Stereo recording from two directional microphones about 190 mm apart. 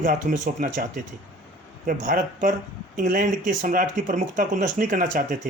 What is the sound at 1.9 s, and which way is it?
Speech, 45° right (ahead or behind).